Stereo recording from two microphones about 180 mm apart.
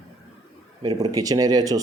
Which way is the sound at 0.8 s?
20° right (ahead or behind).